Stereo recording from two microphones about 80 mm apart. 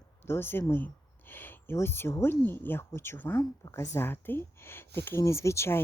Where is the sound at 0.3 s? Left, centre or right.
Left.